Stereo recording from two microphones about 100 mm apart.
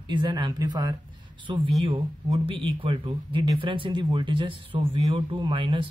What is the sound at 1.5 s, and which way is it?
Speech, 55° right (ahead or behind).